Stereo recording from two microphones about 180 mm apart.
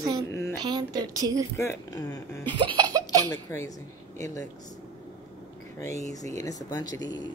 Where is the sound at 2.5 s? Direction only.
25° right (ahead or behind).